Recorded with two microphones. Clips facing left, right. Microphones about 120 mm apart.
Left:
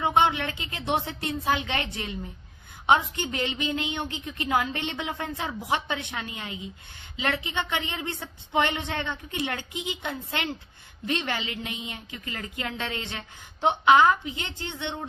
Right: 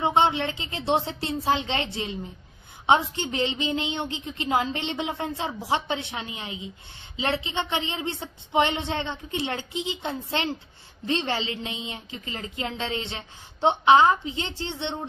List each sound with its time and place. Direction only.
0.0 s a woman's voice: 25° right (ahead or behind)